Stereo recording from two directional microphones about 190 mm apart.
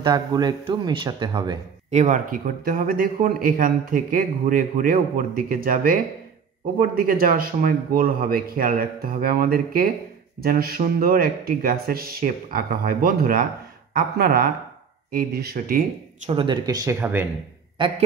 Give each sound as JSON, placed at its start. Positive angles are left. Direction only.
{"t": 0.0, "sound": "speech", "side_deg": -20}
{"t": 1.9, "sound": "a man's voice", "side_deg": -40}
{"t": 16.3, "sound": "speech", "side_deg": -25}
{"t": 17.8, "sound": "speech", "side_deg": -25}